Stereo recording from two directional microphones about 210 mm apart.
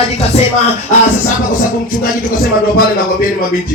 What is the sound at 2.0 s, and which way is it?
A man's voice, 45° left (ahead or behind).